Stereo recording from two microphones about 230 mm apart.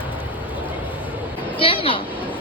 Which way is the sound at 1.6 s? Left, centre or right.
Left.